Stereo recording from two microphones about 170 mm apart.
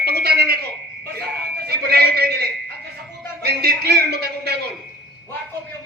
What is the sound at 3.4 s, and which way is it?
Music, 70° right (ahead or behind).